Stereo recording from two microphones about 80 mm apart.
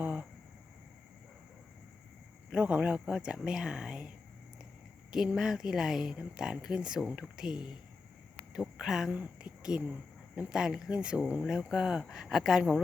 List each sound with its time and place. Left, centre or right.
0.0 s a sound: centre
2.5 s speech: centre
5.1 s speech: centre
9.1 s speech: centre